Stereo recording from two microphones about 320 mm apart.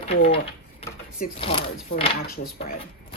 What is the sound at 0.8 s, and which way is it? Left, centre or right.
Speech, centre.